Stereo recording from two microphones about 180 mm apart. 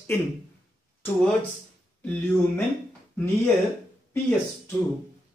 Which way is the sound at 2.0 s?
5° left (ahead or behind).